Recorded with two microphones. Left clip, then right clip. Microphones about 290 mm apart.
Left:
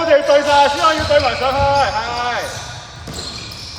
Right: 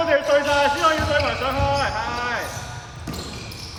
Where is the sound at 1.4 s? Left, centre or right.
Centre.